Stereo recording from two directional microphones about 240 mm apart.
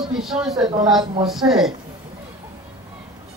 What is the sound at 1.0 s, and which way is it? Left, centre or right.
Speech, centre.